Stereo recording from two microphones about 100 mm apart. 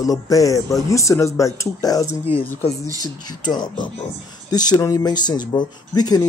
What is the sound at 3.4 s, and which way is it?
Speech, 45° left (ahead or behind).